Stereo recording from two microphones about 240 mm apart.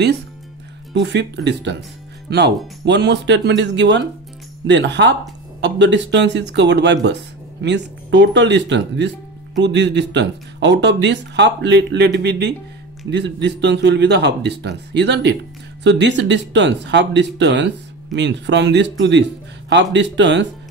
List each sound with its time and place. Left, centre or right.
0.9 s speech: right